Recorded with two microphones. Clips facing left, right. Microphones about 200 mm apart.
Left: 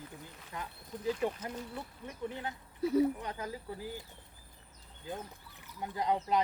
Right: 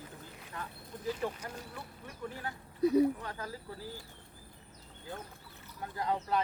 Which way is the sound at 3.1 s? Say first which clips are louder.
Left 2 dB; 20° left (ahead or behind).